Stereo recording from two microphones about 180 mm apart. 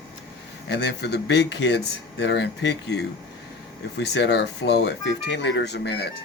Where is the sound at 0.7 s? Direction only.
70° left (ahead or behind).